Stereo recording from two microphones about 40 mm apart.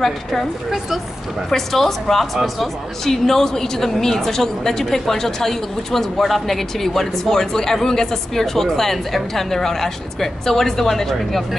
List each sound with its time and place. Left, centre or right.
0.0 s speech: centre
1.5 s speech: centre